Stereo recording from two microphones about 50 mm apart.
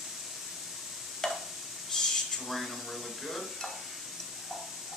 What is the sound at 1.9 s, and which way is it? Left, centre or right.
Stir, centre.